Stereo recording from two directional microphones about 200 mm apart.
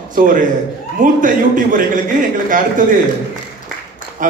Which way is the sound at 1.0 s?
40° right (ahead or behind).